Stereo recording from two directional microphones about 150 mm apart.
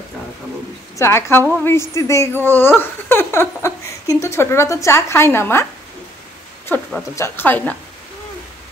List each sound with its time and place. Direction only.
0.9 s speech: 15° left (ahead or behind)
6.7 s a sound: 10° left (ahead or behind)
7.2 s speech: 15° left (ahead or behind)